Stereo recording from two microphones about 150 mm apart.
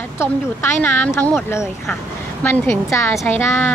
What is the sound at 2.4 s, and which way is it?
Speech, 15° left (ahead or behind).